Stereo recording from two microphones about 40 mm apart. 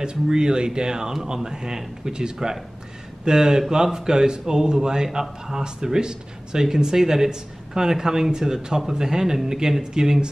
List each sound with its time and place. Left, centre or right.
0.0 s speech: right